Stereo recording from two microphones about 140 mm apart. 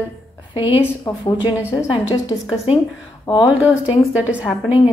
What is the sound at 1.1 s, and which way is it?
Speech, 25° left (ahead or behind).